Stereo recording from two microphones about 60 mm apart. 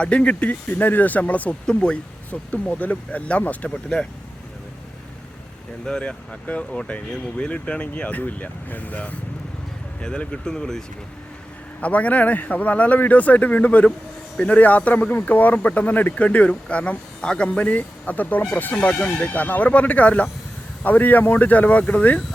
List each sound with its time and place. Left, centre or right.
0.0 s speech: centre
5.8 s speech: centre
10.0 s speech: centre
11.8 s speech: left